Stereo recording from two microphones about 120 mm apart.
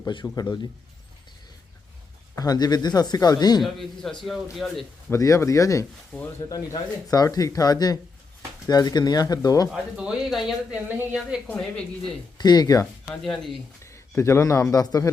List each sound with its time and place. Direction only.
0.1 s speech: 40° left (ahead or behind)
2.3 s speech: 30° left (ahead or behind)
3.6 s speech: centre (ahead or behind)
5.1 s speech: 25° left (ahead or behind)
7.1 s speech: 30° left (ahead or behind)
9.7 s speech: 5° right (ahead or behind)
10.8 s speech: 15° right (ahead or behind)
11.4 s speech: 10° left (ahead or behind)
12.4 s speech: 35° left (ahead or behind)
13.2 s speech: centre (ahead or behind)
13.8 s a sound: 25° left (ahead or behind)
14.7 s speech: 30° left (ahead or behind)